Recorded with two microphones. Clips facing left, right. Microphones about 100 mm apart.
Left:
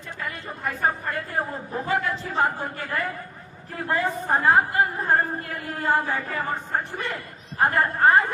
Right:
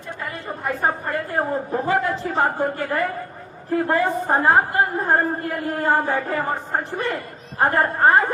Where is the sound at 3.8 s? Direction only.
35° right (ahead or behind).